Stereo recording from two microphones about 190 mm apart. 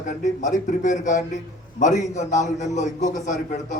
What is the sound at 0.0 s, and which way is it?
A man's voice, 40° left (ahead or behind).